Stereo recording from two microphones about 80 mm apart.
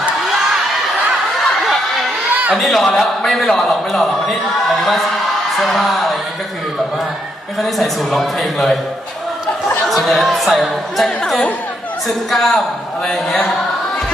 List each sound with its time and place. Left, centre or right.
2.3 s a sound: centre
2.6 s a man's voice: centre
7.6 s a man's voice: centre
9.8 s a man's voice: centre